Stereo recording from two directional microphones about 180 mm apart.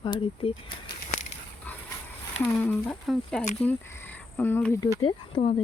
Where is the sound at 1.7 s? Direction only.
10° left (ahead or behind).